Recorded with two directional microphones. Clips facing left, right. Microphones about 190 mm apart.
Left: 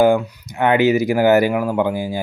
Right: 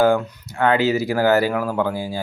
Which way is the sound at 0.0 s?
15° left (ahead or behind).